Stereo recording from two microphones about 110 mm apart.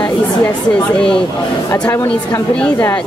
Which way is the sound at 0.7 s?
10° left (ahead or behind).